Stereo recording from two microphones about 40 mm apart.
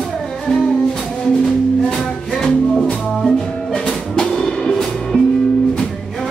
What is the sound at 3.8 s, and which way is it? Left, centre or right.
Music, left.